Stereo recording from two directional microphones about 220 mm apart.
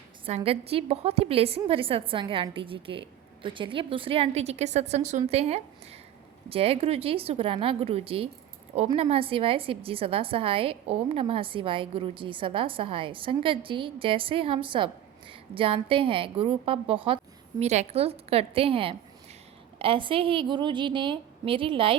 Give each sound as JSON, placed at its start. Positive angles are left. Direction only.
{"t": 0.3, "sound": "a woman's voice", "side_deg": -25}